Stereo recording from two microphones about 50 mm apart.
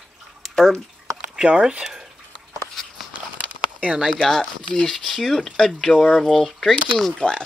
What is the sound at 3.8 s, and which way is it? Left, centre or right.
Speech, right.